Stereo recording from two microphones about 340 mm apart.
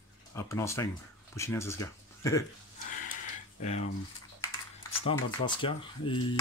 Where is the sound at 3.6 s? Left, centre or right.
Centre.